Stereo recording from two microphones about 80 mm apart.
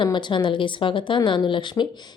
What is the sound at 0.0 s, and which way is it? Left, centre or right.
A woman's voice, left.